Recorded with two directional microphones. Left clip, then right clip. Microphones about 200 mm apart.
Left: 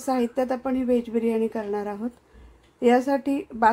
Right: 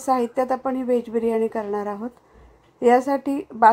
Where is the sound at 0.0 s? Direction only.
5° right (ahead or behind).